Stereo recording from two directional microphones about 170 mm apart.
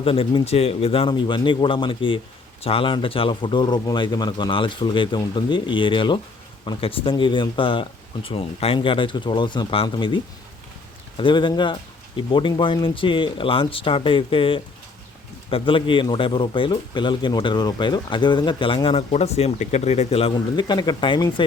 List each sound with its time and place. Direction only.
0.0 s speech: 35° left (ahead or behind)
11.2 s speech: 30° left (ahead or behind)